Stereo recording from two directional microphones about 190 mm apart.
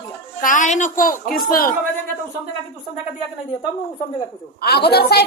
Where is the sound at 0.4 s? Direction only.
40° left (ahead or behind).